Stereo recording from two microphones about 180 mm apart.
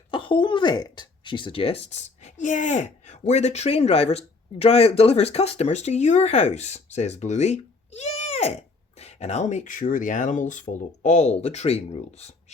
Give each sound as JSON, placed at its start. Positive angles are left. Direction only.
{"t": 0.1, "sound": "speech", "side_deg": 25}